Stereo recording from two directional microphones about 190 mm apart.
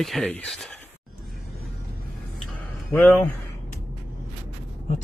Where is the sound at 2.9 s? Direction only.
5° left (ahead or behind).